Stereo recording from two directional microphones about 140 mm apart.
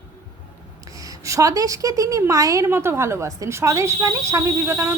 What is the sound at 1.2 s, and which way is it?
A woman's voice, 25° right (ahead or behind).